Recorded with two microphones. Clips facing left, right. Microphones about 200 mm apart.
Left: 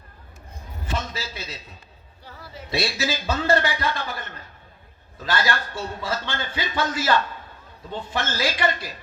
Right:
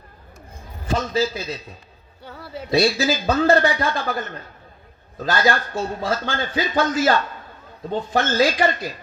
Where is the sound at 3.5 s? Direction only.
30° right (ahead or behind).